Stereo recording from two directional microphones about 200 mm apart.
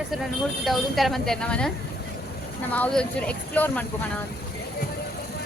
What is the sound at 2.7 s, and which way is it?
Speech, 5° left (ahead or behind).